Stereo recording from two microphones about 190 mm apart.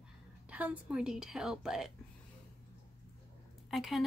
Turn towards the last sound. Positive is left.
turn(degrees=0)  # may be behind; listen again after turning